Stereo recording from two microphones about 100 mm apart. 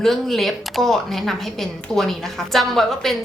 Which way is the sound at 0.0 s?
5° left (ahead or behind).